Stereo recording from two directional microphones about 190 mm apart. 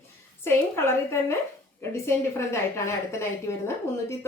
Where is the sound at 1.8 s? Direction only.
15° left (ahead or behind).